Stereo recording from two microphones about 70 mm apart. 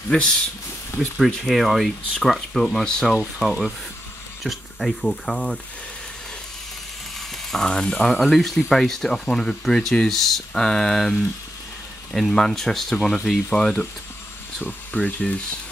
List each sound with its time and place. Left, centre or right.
1.1 s speech: centre
3.4 s speech: centre
7.5 s speech: centre